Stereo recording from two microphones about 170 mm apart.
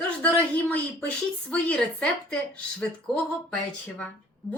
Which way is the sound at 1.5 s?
5° left (ahead or behind).